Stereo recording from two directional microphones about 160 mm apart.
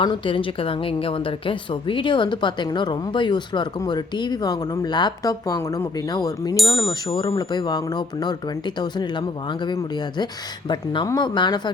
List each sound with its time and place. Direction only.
0.0 s a woman's voice: 35° left (ahead or behind)